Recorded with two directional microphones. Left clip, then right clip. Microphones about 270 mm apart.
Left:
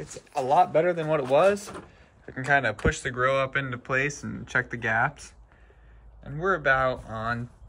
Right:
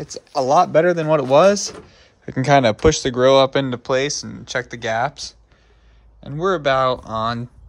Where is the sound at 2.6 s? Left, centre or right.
Right.